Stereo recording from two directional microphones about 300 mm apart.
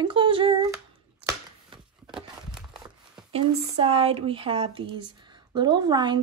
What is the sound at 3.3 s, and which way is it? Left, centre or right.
Speech, centre.